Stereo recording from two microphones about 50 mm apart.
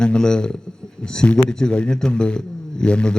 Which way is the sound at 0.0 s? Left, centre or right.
Centre.